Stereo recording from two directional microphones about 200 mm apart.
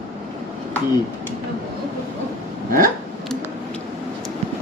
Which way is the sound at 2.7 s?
45° right (ahead or behind).